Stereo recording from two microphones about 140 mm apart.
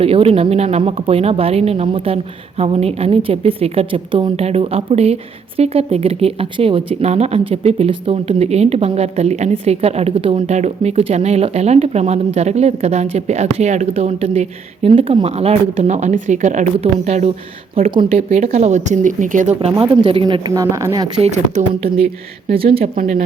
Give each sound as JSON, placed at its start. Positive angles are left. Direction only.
{"t": 0.0, "sound": "speech", "side_deg": -45}
{"t": 10.3, "sound": "speech", "side_deg": -55}
{"t": 19.8, "sound": "a woman's voice", "side_deg": -40}
{"t": 20.5, "sound": "speech", "side_deg": -20}
{"t": 21.2, "sound": "speech", "side_deg": -55}
{"t": 21.9, "sound": "speech", "side_deg": -45}